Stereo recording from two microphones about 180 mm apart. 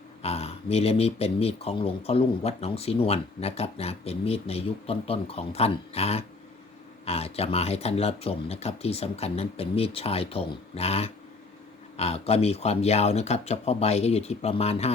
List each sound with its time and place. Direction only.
0.2 s speech: 35° left (ahead or behind)